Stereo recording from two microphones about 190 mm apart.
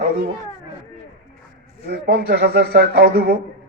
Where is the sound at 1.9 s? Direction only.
60° right (ahead or behind).